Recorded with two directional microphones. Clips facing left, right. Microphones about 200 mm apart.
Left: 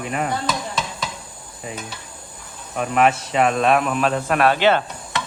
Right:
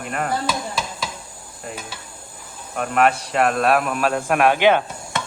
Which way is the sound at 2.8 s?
Centre (ahead or behind).